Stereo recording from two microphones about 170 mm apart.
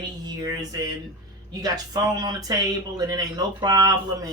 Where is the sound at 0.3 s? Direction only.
20° right (ahead or behind).